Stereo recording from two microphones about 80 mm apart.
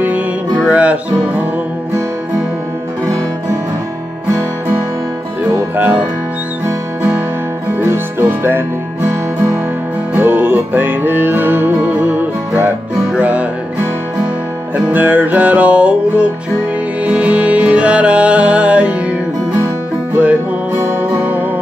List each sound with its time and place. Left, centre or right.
0.7 s music: centre
5.5 s music: right
7.8 s music: right
10.1 s music: right
14.9 s music: right
21.2 s music: right